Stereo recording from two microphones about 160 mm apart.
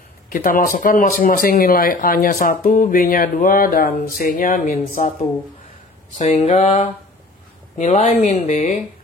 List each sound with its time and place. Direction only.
0.3 s speech: 60° left (ahead or behind)
6.1 s speech: 45° left (ahead or behind)